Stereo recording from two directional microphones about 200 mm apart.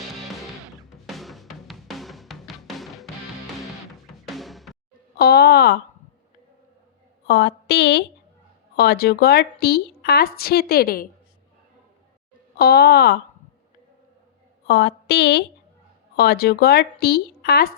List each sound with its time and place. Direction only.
1.0 s music: centre (ahead or behind)
4.3 s music: centre (ahead or behind)
5.1 s a woman's voice: 50° left (ahead or behind)
7.3 s a woman's voice: 55° left (ahead or behind)
12.5 s a woman's voice: 50° left (ahead or behind)
14.7 s a woman's voice: 55° left (ahead or behind)